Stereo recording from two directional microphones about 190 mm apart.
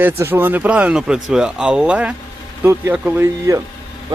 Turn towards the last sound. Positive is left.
turn(degrees=-15)  # may be behind; listen again after turning